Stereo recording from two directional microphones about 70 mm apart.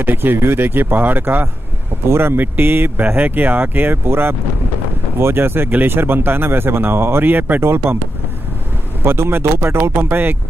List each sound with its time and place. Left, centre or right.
0.0 s speech: right
9.0 s speech: right